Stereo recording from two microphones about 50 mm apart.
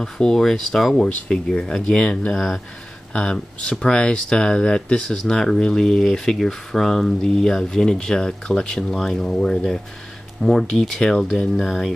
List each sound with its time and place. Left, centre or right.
0.0 s speech: centre
2.3 s speech: centre
11.5 s speech: centre